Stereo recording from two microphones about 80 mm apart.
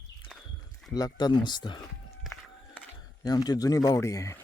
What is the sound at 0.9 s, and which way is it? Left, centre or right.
Speech, left.